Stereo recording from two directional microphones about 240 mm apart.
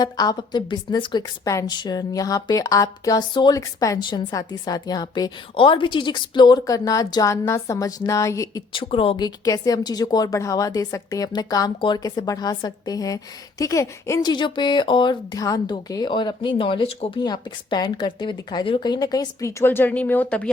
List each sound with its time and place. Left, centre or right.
0.0 s a woman's voice: centre